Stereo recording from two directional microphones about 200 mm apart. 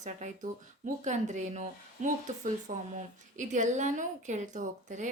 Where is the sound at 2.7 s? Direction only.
40° right (ahead or behind).